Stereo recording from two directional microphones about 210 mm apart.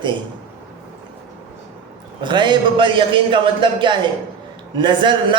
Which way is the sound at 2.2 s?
20° right (ahead or behind).